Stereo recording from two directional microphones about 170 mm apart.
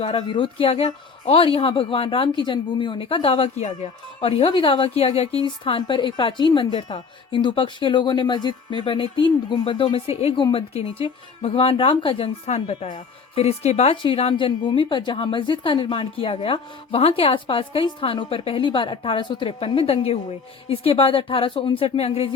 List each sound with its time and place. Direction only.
0.0 s a woman's voice: 35° left (ahead or behind)
13.9 s a woman's voice: 30° left (ahead or behind)